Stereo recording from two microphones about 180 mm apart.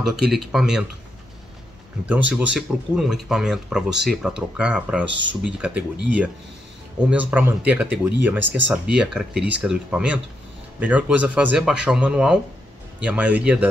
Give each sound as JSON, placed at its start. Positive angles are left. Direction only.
{"t": 0.1, "sound": "speech", "side_deg": 0}
{"t": 2.0, "sound": "speech", "side_deg": -10}
{"t": 8.5, "sound": "speech", "side_deg": -90}
{"t": 8.9, "sound": "speech", "side_deg": -5}